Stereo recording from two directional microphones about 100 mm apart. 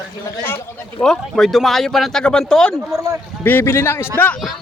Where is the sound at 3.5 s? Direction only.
20° left (ahead or behind).